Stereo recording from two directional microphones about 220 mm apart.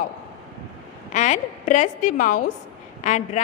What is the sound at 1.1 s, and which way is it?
A woman's voice, 35° left (ahead or behind).